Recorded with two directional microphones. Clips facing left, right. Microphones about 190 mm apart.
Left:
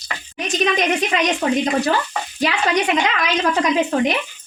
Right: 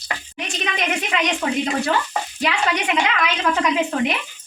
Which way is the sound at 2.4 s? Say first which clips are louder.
Left 4 dB; 40° left (ahead or behind).